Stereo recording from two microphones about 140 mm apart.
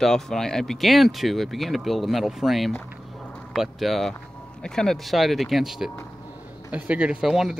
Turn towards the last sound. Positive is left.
turn(degrees=-5)  # may be behind; listen again after turning